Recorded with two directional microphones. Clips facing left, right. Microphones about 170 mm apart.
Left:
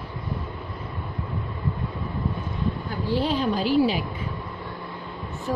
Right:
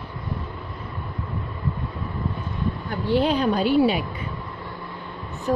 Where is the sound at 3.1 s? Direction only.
65° right (ahead or behind).